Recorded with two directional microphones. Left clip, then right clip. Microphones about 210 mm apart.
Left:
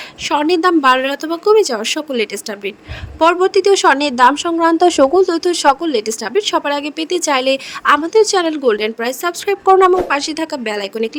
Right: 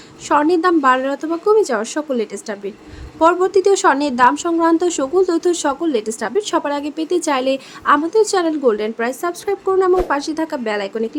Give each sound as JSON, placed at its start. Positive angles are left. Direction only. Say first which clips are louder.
{"t": 0.3, "sound": "a woman's voice", "louder": "left 1 dB", "side_deg": 35}